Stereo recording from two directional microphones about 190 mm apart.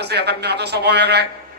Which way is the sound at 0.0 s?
60° right (ahead or behind).